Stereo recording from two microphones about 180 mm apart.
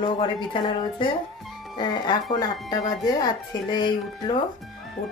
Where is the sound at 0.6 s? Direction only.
25° left (ahead or behind).